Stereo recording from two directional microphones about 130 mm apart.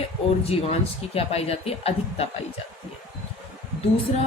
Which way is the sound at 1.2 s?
50° left (ahead or behind).